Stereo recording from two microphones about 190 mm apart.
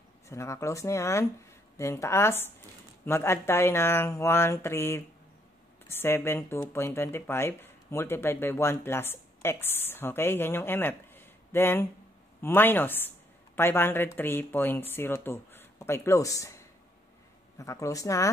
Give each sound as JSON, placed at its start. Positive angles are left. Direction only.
{"t": 0.3, "sound": "speech", "side_deg": 15}